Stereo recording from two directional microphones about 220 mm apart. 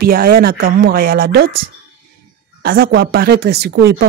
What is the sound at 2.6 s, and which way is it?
Speech, 45° right (ahead or behind).